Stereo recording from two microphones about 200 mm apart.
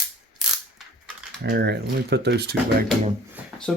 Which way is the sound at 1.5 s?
55° right (ahead or behind).